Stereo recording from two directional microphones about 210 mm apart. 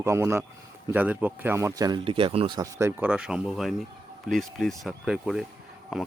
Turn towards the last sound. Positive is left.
turn(degrees=0)  # may be behind; listen again after turning